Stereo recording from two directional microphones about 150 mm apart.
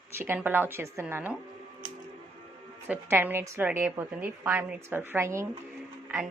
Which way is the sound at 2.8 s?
15° right (ahead or behind).